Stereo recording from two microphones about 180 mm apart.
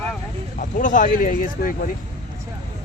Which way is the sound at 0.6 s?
45° left (ahead or behind).